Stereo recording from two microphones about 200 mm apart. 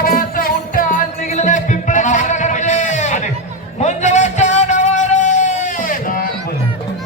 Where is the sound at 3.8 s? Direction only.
35° left (ahead or behind).